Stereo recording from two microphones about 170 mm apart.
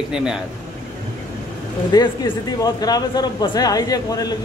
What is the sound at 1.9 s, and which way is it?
A man's voice, 25° left (ahead or behind).